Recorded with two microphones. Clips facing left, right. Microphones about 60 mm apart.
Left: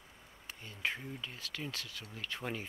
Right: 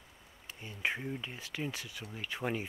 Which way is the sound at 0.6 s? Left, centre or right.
Centre.